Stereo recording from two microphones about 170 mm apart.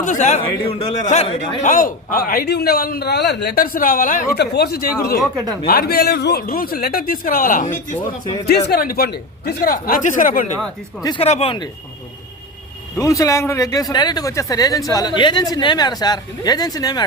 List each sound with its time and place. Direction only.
0.0 s a man's voice: 45° left (ahead or behind)
4.4 s a man's voice: 70° left (ahead or behind); by 7.9 s 50° left (ahead or behind)
8.4 s a man's voice: 70° left (ahead or behind); by 10.5 s 55° left (ahead or behind)
11.2 s speech: 35° left (ahead or behind)
13.0 s speech: 20° left (ahead or behind)